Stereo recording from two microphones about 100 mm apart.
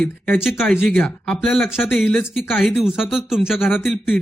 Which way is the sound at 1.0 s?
5° left (ahead or behind).